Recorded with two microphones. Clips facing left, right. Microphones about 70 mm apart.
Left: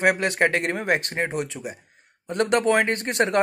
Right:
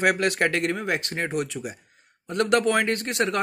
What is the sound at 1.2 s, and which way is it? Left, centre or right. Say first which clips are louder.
Speech: left 1 dB; left.